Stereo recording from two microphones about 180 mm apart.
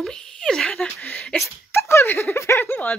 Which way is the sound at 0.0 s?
5° left (ahead or behind).